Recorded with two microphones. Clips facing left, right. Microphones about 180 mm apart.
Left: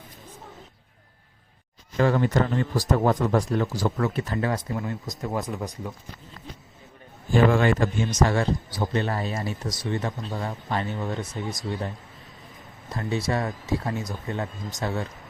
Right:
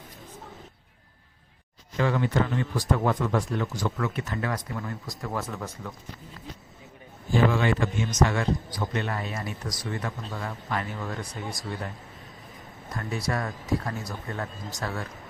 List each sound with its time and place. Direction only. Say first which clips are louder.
2.0 s a man's voice: left 3 dB; 45° left (ahead or behind); by 5.9 s 15° left (ahead or behind)
7.3 s a man's voice: left 3 dB; 50° left (ahead or behind); by 11.9 s 20° left (ahead or behind)
12.9 s a man's voice: left 4 dB; 25° left (ahead or behind)